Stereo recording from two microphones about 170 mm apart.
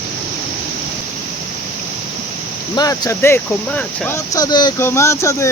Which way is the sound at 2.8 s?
20° left (ahead or behind).